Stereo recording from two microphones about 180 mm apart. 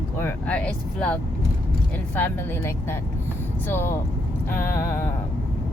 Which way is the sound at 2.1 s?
10° left (ahead or behind).